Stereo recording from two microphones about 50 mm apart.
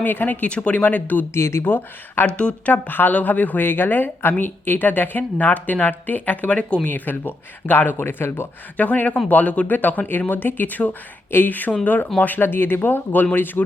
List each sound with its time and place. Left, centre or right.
0.0 s speech: left
0.4 s speech: left
1.3 s speech: left
1.6 s speech: left
2.2 s speech: left
2.7 s speech: left
6.5 s speech: left
6.8 s speech: left
7.9 s speech: left
8.8 s speech: left